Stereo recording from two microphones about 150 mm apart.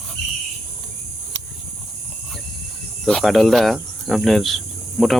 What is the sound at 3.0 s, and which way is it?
Speech, centre (ahead or behind).